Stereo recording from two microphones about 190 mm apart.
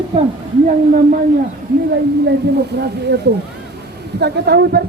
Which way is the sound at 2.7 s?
60° right (ahead or behind).